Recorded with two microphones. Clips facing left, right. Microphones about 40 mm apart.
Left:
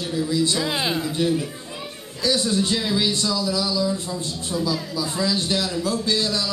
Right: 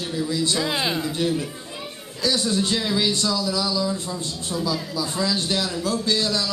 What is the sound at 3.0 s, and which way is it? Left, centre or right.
A man's voice, centre.